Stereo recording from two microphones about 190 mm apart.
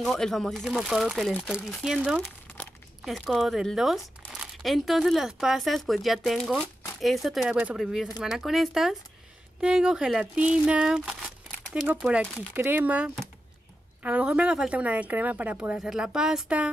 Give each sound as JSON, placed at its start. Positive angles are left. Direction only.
{"t": 0.0, "sound": "a woman's voice", "side_deg": 0}